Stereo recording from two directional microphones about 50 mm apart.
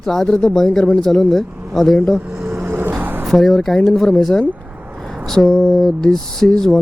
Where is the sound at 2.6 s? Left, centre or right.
Right.